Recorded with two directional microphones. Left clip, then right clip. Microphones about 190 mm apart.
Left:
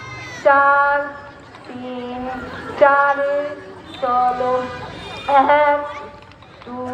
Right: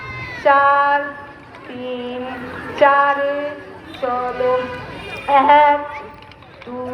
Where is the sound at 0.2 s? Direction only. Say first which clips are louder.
Right 3 dB; 80° left.